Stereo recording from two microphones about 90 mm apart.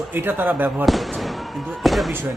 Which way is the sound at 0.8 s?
Centre (ahead or behind).